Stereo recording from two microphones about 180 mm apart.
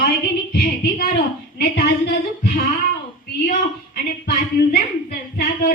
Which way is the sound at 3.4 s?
50° left (ahead or behind).